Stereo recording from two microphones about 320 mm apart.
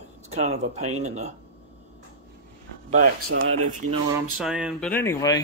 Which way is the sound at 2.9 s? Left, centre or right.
Right.